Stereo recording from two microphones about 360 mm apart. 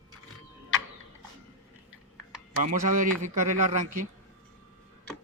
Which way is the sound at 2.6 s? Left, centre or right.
Right.